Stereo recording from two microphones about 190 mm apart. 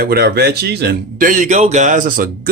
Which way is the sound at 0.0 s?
55° right (ahead or behind).